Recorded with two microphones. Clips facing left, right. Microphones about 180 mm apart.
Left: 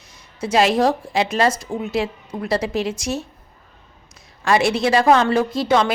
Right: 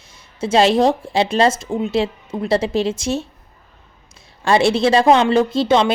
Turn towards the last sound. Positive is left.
turn(degrees=-25)  # may be behind; listen again after turning